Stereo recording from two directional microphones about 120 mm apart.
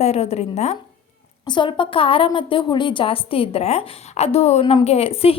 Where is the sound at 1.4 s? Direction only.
40° left (ahead or behind).